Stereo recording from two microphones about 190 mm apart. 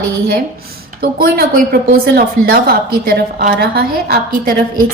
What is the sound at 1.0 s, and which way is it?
A woman's voice, 55° right (ahead or behind).